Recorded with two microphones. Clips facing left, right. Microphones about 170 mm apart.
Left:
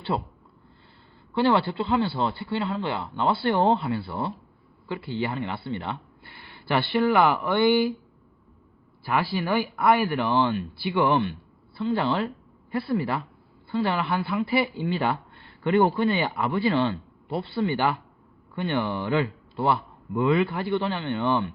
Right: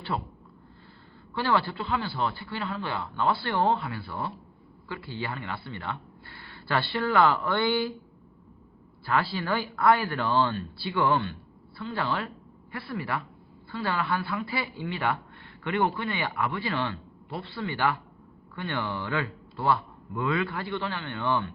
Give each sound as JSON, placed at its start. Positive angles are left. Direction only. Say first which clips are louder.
{"t": 0.1, "sound": "a man's voice", "louder": "left 3 dB", "side_deg": 20}
{"t": 1.4, "sound": "a man's voice", "louder": "left 5 dB", "side_deg": 25}
{"t": 9.3, "sound": "a man's voice", "louder": "left 4 dB", "side_deg": 15}